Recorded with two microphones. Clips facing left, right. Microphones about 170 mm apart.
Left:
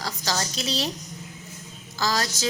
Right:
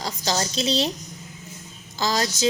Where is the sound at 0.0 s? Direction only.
25° right (ahead or behind).